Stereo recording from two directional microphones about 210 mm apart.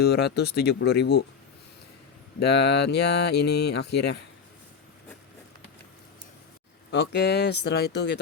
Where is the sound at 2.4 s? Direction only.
50° left (ahead or behind).